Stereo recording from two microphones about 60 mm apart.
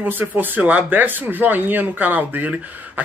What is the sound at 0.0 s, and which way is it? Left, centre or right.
Speech, right.